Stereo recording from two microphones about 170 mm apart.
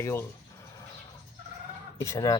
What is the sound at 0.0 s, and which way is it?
Speech, 15° left (ahead or behind).